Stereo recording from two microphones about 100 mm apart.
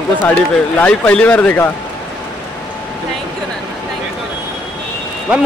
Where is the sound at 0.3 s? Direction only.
15° left (ahead or behind).